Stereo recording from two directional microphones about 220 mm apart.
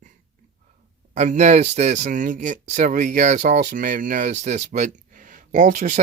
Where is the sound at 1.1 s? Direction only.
30° right (ahead or behind).